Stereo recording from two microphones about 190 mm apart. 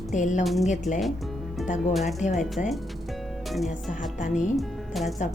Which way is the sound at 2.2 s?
40° left (ahead or behind).